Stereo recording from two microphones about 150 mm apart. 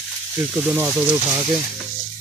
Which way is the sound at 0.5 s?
15° right (ahead or behind).